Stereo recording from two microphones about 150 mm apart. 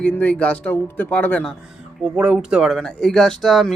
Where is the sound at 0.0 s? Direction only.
10° left (ahead or behind).